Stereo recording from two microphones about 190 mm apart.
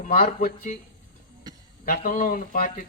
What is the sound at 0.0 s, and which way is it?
Speech, 45° left (ahead or behind).